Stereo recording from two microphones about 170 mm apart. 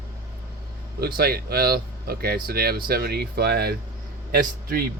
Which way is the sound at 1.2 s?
65° right (ahead or behind).